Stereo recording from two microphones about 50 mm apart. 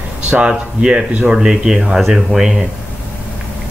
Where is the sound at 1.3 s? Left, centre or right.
Centre.